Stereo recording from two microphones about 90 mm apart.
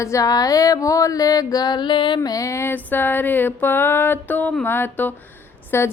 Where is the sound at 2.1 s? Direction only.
40° left (ahead or behind).